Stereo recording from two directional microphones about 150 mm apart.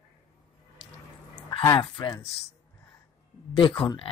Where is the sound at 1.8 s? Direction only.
30° left (ahead or behind).